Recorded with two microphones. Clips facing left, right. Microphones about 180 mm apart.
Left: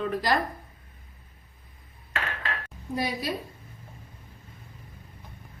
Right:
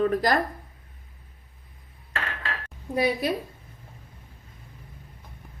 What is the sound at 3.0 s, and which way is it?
Speech, 60° right (ahead or behind).